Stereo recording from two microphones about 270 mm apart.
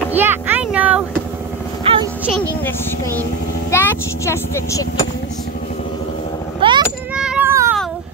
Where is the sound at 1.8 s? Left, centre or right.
Centre.